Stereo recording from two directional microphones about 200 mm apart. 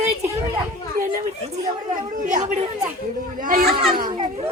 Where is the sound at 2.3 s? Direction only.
40° right (ahead or behind).